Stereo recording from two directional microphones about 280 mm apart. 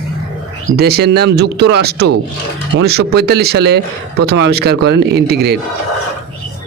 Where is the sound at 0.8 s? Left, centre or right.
Right.